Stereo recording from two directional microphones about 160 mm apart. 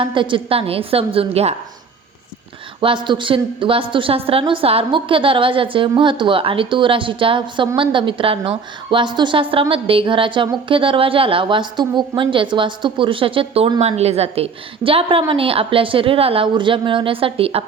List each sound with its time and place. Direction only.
0.0 s a woman's voice: 30° right (ahead or behind)
2.8 s a woman's voice: 30° right (ahead or behind)